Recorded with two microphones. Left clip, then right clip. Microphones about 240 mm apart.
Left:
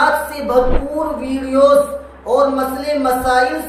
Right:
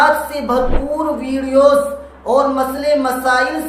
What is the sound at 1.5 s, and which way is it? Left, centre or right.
A woman's voice, centre.